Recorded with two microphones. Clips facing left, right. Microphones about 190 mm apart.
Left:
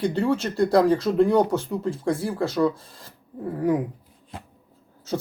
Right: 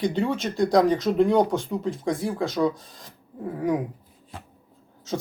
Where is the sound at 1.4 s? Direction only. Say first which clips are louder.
Left 1 dB; 15° right (ahead or behind).